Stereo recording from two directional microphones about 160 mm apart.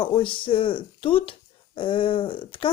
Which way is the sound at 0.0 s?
30° left (ahead or behind).